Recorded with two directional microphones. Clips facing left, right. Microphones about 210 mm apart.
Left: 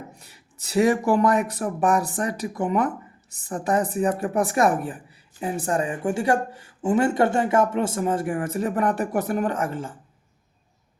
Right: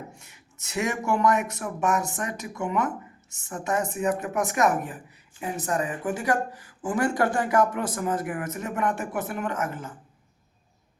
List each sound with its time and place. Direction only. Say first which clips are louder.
0.2 s speech: left 2 dB; 35° left (ahead or behind)